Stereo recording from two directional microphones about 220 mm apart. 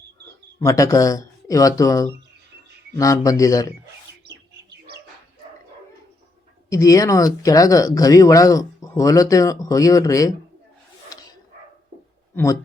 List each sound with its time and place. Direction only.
0.6 s speech: 15° left (ahead or behind)
6.7 s speech: 15° left (ahead or behind)
11.1 s dog: 15° left (ahead or behind)
12.3 s speech: 10° left (ahead or behind)